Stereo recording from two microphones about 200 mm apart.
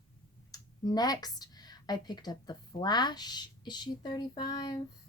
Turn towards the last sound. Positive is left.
turn(degrees=20)  # may be behind; listen again after turning